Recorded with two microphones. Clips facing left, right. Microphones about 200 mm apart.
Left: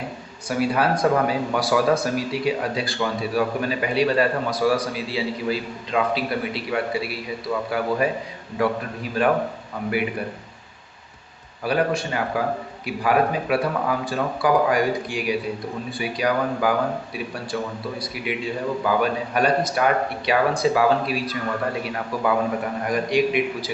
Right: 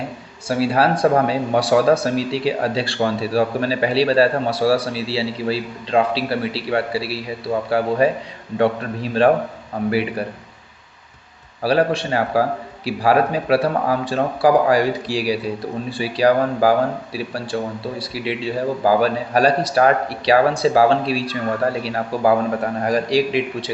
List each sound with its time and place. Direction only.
0.4 s a man's voice: 30° right (ahead or behind)
11.6 s a man's voice: 30° right (ahead or behind)